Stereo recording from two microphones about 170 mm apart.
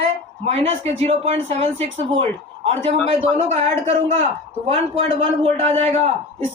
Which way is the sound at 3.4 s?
40° right (ahead or behind).